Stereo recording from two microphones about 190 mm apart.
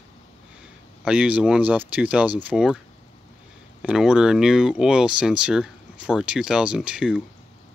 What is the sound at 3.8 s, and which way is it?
Speech, 5° right (ahead or behind).